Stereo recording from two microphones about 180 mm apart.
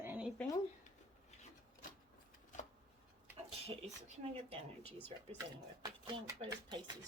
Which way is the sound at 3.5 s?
35° right (ahead or behind).